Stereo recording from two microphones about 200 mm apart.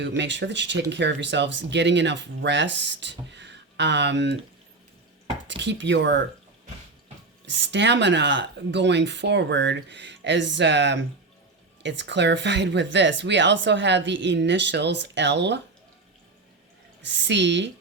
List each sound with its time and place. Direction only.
0.0 s speech: 60° right (ahead or behind)
5.5 s speech: 65° right (ahead or behind)
7.4 s speech: 65° right (ahead or behind)
17.0 s speech: 60° right (ahead or behind)